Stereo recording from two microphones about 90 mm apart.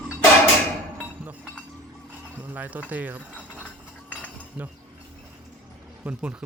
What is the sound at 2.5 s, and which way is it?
Speech, 15° right (ahead or behind).